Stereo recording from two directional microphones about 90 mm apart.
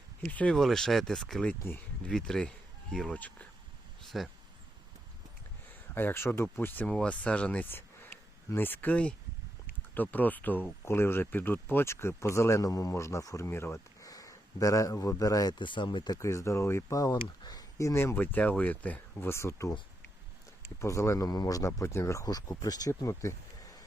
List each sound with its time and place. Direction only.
0.3 s speech: 15° left (ahead or behind)
0.5 s speech: 5° left (ahead or behind)
4.1 s speech: centre (ahead or behind)
5.9 s speech: 25° left (ahead or behind)
6.8 s speech: 10° left (ahead or behind)
7.7 s a sound: 25° left (ahead or behind)
9.9 s speech: 20° left (ahead or behind)
14.0 s speech: 40° left (ahead or behind)
15.5 s speech: 60° left (ahead or behind)
16.1 s speech: 35° left (ahead or behind)
17.0 s speech: 45° left (ahead or behind); by 19.3 s 20° left (ahead or behind)
19.3 s speech: 30° left (ahead or behind)
20.8 s speech: 35° left (ahead or behind)
21.2 s speech: 45° left (ahead or behind)